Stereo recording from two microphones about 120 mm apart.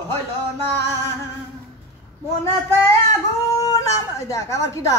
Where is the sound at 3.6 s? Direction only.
30° left (ahead or behind).